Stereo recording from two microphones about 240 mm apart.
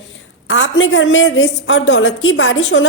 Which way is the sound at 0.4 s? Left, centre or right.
Left.